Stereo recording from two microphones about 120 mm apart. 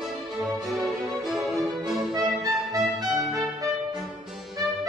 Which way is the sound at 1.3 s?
Centre (ahead or behind).